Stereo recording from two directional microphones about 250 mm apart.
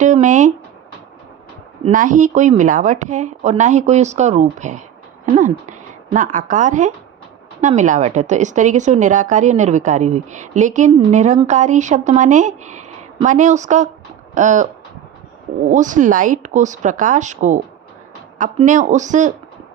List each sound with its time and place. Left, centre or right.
0.0 s a woman's voice: right
1.8 s a woman's voice: right
15.7 s a woman's voice: right